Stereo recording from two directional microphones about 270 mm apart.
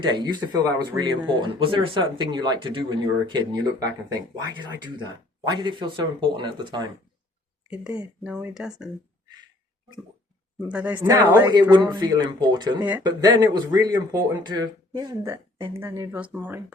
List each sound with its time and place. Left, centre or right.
0.0 s speech: centre
7.7 s speech: centre
10.7 s speech: centre